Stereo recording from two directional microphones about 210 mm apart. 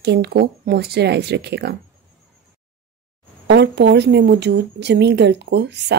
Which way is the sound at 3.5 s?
55° right (ahead or behind).